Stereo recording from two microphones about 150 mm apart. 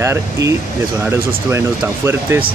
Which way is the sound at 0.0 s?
20° right (ahead or behind).